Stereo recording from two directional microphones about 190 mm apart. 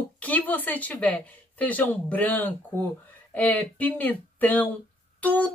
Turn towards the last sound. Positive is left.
turn(degrees=10)  # may be behind; listen again after turning